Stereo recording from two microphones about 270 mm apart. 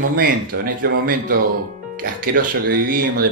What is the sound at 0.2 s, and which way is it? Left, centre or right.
Speech, right.